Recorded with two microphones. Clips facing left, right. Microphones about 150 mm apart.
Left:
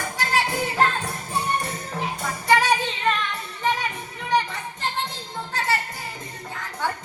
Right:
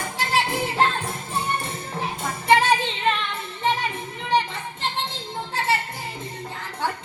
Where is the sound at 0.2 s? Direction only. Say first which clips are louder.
Right 1 dB; 25° right (ahead or behind).